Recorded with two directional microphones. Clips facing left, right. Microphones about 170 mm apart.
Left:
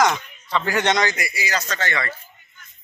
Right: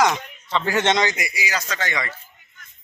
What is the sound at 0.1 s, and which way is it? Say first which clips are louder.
A man's voice: even; 20° right (ahead or behind).